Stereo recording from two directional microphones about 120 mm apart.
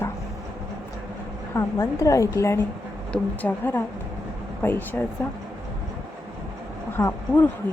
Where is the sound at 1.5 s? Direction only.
25° left (ahead or behind).